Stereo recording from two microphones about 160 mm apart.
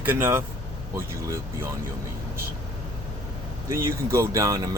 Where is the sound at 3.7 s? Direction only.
20° right (ahead or behind).